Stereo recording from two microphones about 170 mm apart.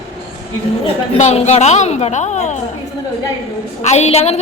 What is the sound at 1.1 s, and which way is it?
A woman's voice, 40° left (ahead or behind).